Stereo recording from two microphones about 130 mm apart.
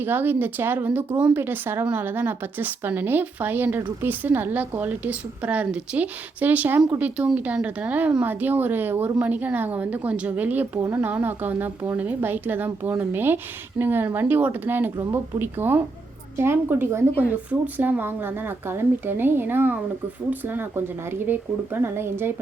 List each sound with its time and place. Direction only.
0.0 s speech: 15° right (ahead or behind)